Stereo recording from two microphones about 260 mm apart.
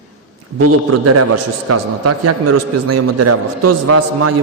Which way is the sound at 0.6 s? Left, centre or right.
Right.